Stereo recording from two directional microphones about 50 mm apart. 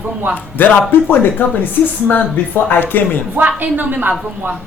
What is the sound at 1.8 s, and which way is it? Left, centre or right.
Speech, left.